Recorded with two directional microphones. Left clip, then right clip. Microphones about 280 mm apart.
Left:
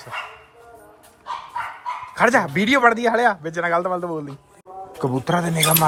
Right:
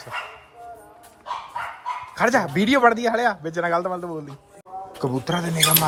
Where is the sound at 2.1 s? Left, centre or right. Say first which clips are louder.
Left 3 dB; centre.